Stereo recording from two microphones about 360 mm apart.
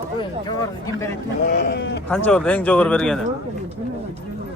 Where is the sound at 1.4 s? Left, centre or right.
Left.